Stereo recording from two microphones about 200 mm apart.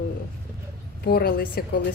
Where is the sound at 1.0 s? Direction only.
50° left (ahead or behind).